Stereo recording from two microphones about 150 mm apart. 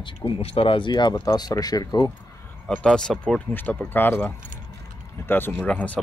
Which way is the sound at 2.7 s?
5° left (ahead or behind).